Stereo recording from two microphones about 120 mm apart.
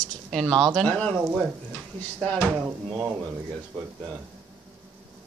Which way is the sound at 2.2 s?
Centre (ahead or behind).